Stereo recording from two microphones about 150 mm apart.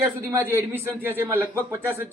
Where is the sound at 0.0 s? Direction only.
15° right (ahead or behind).